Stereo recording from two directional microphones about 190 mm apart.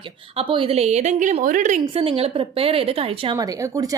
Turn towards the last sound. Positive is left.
turn(degrees=-20)  # may be behind; listen again after turning